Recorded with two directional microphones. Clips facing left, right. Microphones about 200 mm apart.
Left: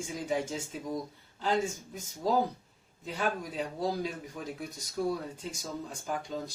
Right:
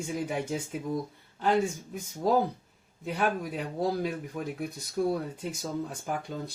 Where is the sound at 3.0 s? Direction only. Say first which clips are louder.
Right 4 dB; 60° right (ahead or behind).